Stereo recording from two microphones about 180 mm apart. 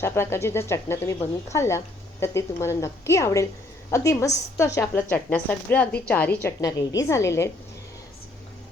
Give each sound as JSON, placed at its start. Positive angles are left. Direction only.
{"t": 0.0, "sound": "a woman's voice", "side_deg": 15}